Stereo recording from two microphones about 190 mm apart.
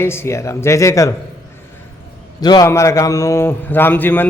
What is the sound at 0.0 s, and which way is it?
A man's voice, 10° left (ahead or behind).